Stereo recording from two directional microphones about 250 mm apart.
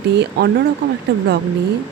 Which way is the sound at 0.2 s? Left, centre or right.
Right.